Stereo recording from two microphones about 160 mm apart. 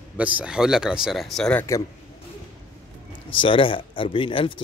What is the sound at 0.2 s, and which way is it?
Speech, 10° right (ahead or behind).